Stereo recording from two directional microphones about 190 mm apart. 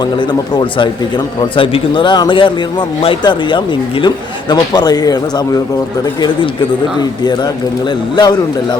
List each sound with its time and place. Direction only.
0.0 s a man's voice: 20° left (ahead or behind)
7.0 s a man's voice: 20° left (ahead or behind)